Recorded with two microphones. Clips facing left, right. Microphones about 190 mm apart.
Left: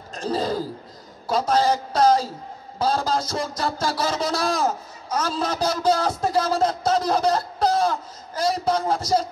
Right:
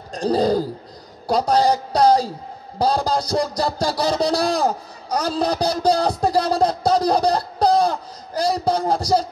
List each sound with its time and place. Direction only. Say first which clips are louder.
0.1 s a man's voice: right 6 dB; 35° right (ahead or behind)